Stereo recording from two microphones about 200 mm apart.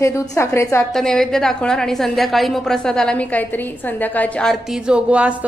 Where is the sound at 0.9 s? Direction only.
Centre (ahead or behind).